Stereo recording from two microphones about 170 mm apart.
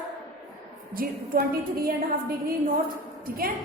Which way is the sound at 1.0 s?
60° right (ahead or behind).